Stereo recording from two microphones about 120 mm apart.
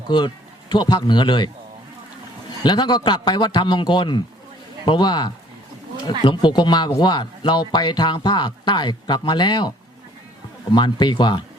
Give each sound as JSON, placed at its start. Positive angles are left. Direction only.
{"t": 0.7, "sound": "speech", "side_deg": 40}
{"t": 2.6, "sound": "speech", "side_deg": 40}